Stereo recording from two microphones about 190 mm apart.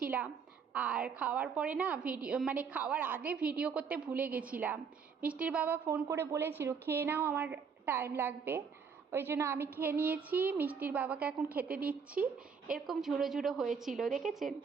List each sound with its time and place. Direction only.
0.7 s a woman's voice: 5° right (ahead or behind)